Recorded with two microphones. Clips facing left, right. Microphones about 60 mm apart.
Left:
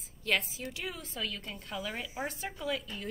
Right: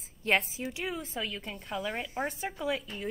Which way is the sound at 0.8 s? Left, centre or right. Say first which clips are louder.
Right 3 dB; centre.